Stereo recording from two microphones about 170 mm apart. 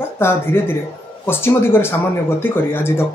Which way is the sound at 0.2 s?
15° left (ahead or behind).